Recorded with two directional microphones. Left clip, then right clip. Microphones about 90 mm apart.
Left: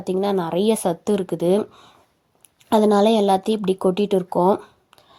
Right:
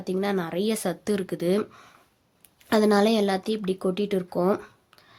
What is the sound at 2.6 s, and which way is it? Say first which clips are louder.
A woman's voice: left 5 dB; 20° left (ahead or behind).